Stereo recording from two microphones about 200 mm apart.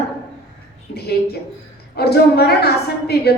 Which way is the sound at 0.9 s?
55° left (ahead or behind).